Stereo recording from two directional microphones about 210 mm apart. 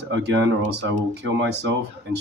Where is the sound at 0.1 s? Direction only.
60° right (ahead or behind).